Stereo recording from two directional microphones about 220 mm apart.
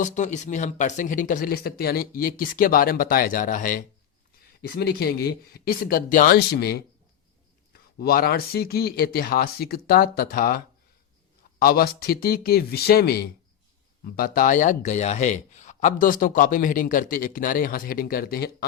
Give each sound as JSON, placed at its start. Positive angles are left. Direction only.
{"t": 0.0, "sound": "speech", "side_deg": 35}
{"t": 11.6, "sound": "speech", "side_deg": 45}